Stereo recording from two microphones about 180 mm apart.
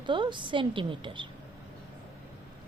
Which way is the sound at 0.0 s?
25° right (ahead or behind).